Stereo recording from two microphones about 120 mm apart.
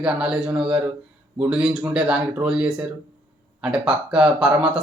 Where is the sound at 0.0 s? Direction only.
5° right (ahead or behind).